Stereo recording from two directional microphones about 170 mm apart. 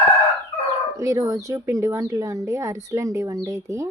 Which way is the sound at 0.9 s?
20° right (ahead or behind).